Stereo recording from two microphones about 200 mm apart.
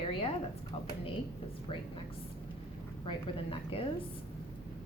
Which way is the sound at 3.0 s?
30° left (ahead or behind).